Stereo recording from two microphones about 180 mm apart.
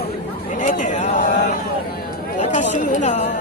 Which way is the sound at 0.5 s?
45° left (ahead or behind).